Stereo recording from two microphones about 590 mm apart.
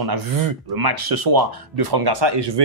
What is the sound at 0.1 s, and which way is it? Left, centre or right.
Speech, right.